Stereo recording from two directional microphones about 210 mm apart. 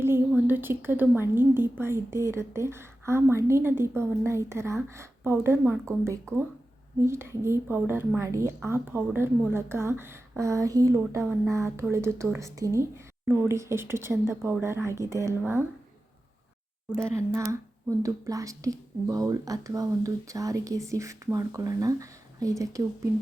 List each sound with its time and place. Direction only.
0.0 s a woman's voice: 10° right (ahead or behind)
16.9 s a woman's voice: 10° right (ahead or behind)